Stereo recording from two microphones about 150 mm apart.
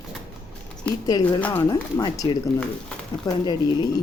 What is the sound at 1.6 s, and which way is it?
A woman's voice, 25° left (ahead or behind).